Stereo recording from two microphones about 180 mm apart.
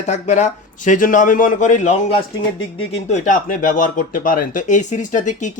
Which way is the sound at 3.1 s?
45° left (ahead or behind).